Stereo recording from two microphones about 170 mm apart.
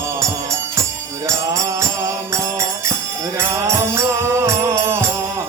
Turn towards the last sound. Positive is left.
turn(degrees=-15)  # may be behind; listen again after turning